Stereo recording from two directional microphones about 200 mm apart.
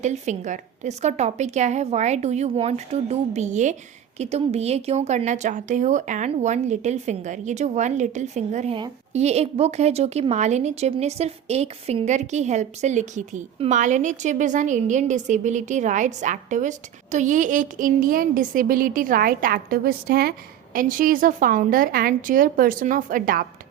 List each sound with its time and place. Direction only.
0.0 s a woman's voice: 35° right (ahead or behind)